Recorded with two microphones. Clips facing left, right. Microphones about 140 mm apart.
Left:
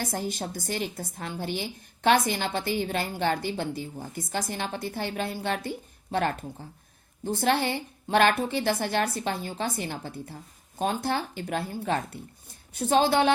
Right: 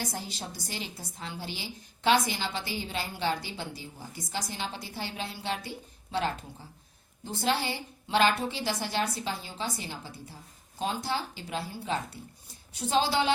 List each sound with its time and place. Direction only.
0.0 s a woman's voice: 50° left (ahead or behind)